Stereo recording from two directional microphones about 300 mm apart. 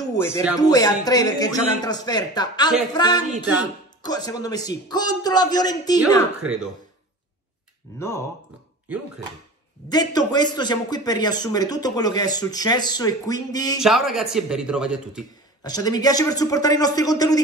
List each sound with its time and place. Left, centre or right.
0.0 s a sound: centre
0.6 s a man's voice: centre
6.4 s speech: centre
8.0 s a man's voice: centre
9.8 s a man's voice: centre
13.7 s speech: centre
15.6 s a man's voice: centre